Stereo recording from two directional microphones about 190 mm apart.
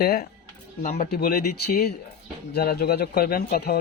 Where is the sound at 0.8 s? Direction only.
40° left (ahead or behind).